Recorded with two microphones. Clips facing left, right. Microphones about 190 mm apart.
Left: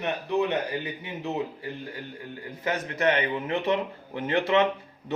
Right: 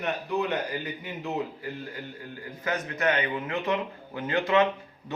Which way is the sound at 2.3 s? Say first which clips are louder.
Left 1 dB; 30° left (ahead or behind).